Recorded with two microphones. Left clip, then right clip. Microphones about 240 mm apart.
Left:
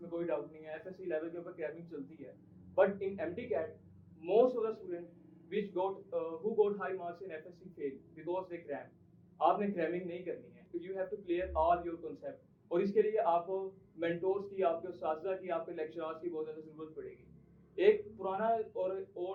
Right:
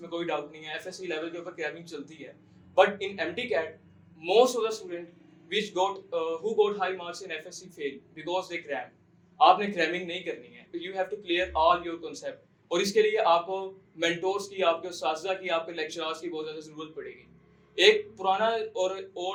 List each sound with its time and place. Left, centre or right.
0.1 s speech: right